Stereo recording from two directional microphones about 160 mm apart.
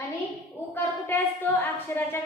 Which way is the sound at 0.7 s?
10° left (ahead or behind).